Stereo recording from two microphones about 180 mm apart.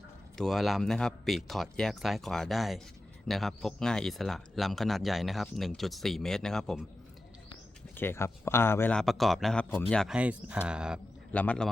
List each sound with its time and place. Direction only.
0.3 s speech: centre (ahead or behind)
7.9 s speech: 15° left (ahead or behind); by 11.0 s 5° right (ahead or behind)
11.3 s speech: 5° left (ahead or behind)